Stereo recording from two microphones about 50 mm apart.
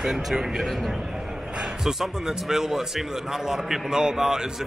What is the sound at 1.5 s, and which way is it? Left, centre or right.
A man's voice, centre.